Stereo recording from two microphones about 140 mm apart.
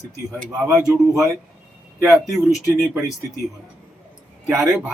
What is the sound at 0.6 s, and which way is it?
A man's voice, 10° right (ahead or behind).